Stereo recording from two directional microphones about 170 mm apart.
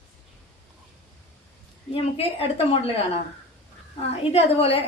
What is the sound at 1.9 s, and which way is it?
A woman's voice, 35° left (ahead or behind).